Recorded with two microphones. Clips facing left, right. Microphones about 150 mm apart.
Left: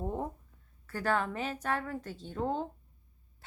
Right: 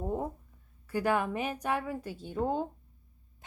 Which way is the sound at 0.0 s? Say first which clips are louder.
Right 2 dB; 5° right (ahead or behind).